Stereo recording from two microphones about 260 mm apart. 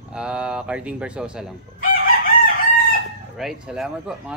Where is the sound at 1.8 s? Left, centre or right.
Left.